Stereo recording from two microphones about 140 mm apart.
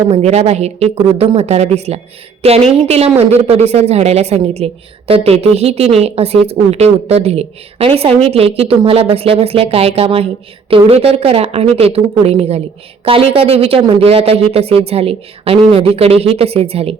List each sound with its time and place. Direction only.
0.1 s a woman's voice: 50° right (ahead or behind)